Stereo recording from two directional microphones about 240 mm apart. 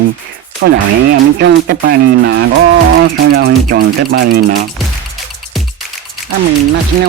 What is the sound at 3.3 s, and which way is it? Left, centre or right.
Speech, right.